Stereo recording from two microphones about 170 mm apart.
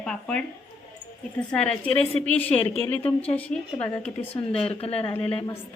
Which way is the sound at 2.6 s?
30° left (ahead or behind).